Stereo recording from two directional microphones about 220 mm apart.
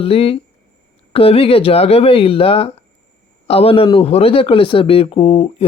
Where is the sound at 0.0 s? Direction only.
25° left (ahead or behind).